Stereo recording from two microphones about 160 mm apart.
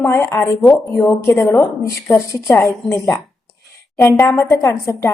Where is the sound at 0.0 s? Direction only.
15° left (ahead or behind).